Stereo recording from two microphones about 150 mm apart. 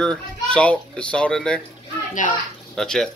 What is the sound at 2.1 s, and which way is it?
Speech, 60° left (ahead or behind).